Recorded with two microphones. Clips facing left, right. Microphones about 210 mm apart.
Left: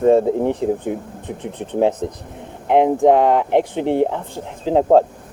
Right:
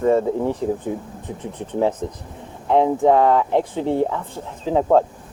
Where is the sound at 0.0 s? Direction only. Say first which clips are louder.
Left 4 dB; 25° left (ahead or behind).